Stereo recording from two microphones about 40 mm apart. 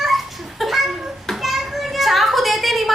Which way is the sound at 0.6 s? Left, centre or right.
Centre.